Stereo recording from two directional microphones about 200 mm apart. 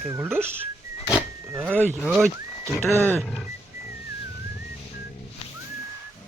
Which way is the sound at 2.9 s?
15° right (ahead or behind).